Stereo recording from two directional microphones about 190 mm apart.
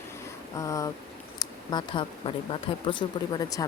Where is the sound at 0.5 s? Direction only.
15° left (ahead or behind).